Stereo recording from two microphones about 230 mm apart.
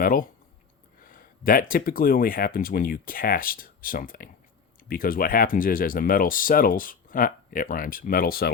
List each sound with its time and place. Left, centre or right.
0.0 s speech: left